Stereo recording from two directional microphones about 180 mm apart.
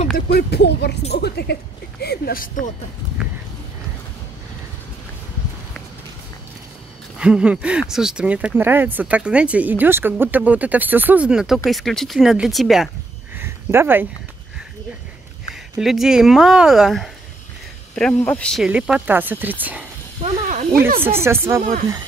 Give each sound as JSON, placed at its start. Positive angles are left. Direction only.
{"t": 0.3, "sound": "speech", "side_deg": 65}
{"t": 7.2, "sound": "speech", "side_deg": -5}
{"t": 13.4, "sound": "a sound", "side_deg": -15}
{"t": 15.8, "sound": "speech", "side_deg": 0}
{"t": 18.7, "sound": "speech", "side_deg": -5}
{"t": 20.4, "sound": "snake", "side_deg": -45}
{"t": 21.0, "sound": "speech", "side_deg": -15}